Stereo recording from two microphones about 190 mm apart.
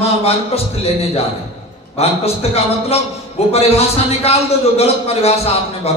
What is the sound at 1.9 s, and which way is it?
A man's voice, 35° left (ahead or behind).